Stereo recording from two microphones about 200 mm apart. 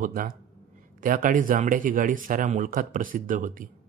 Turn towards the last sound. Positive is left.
turn(degrees=-40)  # may be behind; listen again after turning